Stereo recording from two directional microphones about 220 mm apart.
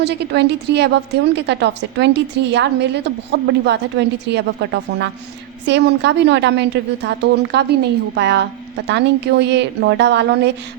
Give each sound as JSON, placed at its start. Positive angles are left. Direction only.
{"t": 0.0, "sound": "a woman's voice", "side_deg": -50}